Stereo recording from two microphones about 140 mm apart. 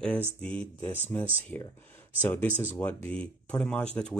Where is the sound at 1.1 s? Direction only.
15° left (ahead or behind).